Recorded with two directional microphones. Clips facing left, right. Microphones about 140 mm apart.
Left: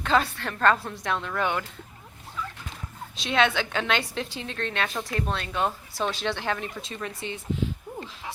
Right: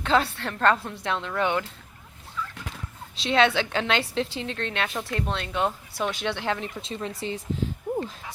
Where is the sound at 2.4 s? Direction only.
20° left (ahead or behind).